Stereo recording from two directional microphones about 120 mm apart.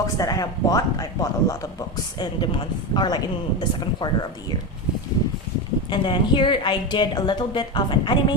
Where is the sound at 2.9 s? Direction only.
35° left (ahead or behind).